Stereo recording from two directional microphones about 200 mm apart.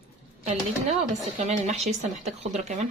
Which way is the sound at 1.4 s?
35° right (ahead or behind).